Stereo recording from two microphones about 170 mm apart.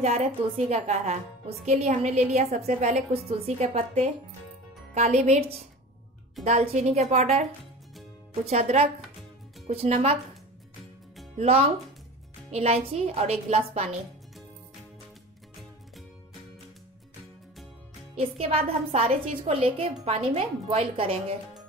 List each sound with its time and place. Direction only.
0.0 s a woman's voice: 40° right (ahead or behind)
8.5 s a woman's voice: 40° right (ahead or behind)
11.3 s a woman's voice: 35° right (ahead or behind)
18.1 s a woman's voice: 35° right (ahead or behind)